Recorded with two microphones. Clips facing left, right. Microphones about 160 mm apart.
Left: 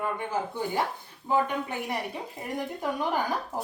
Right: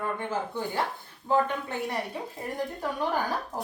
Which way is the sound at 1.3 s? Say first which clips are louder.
Right 1 dB; 15° left (ahead or behind).